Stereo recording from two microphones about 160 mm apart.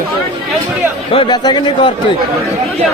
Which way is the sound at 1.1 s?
30° left (ahead or behind).